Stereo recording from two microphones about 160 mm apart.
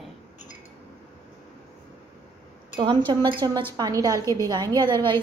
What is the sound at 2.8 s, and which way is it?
A woman's voice, 30° right (ahead or behind).